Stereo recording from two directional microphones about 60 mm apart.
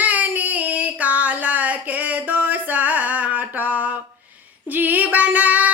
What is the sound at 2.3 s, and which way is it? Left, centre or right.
Music, right.